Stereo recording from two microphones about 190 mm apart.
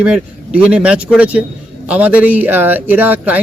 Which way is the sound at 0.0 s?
5° right (ahead or behind).